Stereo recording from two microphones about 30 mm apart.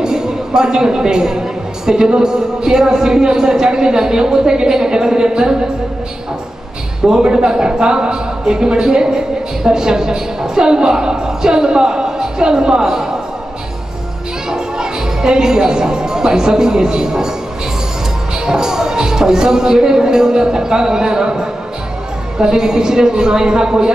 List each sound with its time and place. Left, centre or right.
0.0 s speech: right
7.1 s speech: right
14.5 s speech: right
18.4 s speech: right